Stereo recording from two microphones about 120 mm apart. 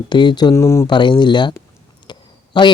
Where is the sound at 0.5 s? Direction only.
20° left (ahead or behind).